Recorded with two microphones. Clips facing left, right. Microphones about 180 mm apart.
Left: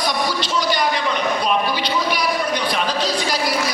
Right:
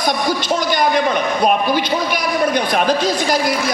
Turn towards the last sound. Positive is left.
turn(degrees=-50)  # may be behind; listen again after turning